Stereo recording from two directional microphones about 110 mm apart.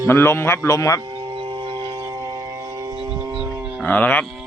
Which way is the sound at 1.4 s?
50° right (ahead or behind).